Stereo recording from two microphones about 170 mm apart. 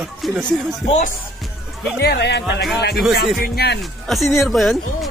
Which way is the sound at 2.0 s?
75° left (ahead or behind).